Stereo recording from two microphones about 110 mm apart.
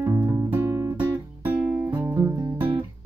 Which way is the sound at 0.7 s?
30° right (ahead or behind).